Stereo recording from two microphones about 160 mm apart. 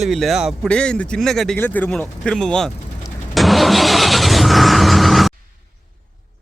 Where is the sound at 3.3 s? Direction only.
Centre (ahead or behind).